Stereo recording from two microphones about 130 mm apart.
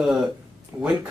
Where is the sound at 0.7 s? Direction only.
20° right (ahead or behind).